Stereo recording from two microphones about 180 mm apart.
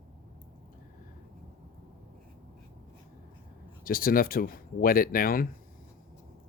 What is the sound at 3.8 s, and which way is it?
Speech, 55° left (ahead or behind).